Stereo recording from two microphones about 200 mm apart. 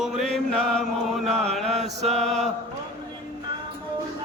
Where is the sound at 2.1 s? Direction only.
Centre (ahead or behind).